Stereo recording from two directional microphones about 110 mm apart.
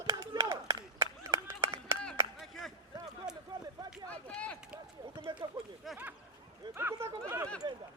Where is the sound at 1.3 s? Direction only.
25° right (ahead or behind).